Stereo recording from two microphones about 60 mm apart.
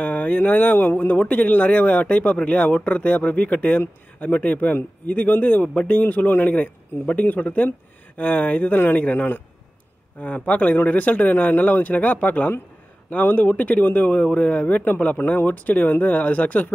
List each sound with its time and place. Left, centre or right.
0.0 s speech: left